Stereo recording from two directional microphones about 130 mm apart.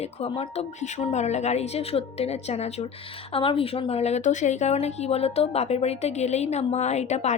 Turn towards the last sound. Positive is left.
turn(degrees=60)  # may be behind; listen again after turning